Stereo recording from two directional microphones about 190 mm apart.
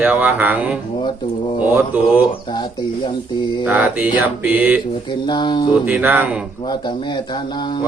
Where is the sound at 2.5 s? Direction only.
25° left (ahead or behind).